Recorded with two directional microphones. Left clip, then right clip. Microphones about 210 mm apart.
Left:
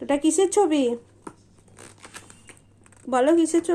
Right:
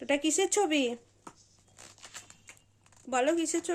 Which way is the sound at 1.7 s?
15° left (ahead or behind).